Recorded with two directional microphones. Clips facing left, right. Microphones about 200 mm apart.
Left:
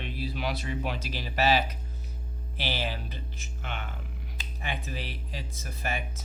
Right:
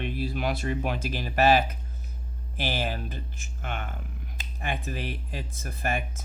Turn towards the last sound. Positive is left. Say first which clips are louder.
# right 4 dB
turn(degrees=-50)  # may be behind; listen again after turning